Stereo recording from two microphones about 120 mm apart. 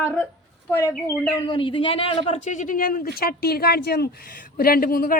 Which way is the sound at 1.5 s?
45° left (ahead or behind).